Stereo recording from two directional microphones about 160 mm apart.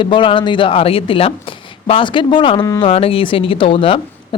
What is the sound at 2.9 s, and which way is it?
Speech, 35° left (ahead or behind).